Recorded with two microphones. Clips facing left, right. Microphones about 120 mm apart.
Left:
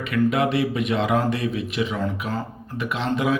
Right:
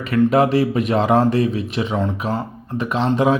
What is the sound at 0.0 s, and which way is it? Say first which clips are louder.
Speech: right 5 dB; 35° right (ahead or behind).